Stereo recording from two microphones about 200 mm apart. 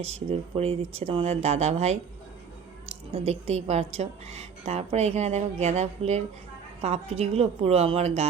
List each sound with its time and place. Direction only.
0.0 s a woman's voice: 30° right (ahead or behind)
3.1 s a woman's voice: 30° right (ahead or behind)